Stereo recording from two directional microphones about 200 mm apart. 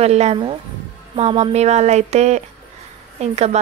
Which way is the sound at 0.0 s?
30° right (ahead or behind).